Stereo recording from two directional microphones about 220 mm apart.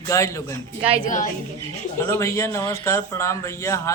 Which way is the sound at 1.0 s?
35° left (ahead or behind).